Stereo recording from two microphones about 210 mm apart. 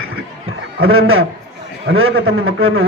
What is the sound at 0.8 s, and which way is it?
A man's voice, 80° right.